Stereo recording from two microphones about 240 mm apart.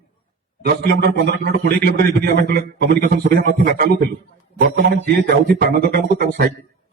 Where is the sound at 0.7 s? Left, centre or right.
Right.